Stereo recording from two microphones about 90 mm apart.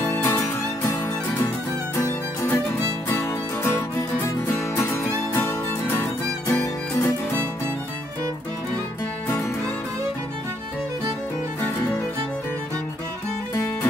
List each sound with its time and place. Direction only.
0.0 s music: 25° left (ahead or behind)
2.0 s music: 30° left (ahead or behind)